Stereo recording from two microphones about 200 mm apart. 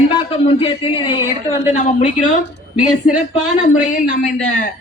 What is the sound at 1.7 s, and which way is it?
Speech, 40° left (ahead or behind).